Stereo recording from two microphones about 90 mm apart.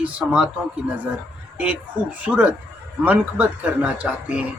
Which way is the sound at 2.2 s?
20° right (ahead or behind).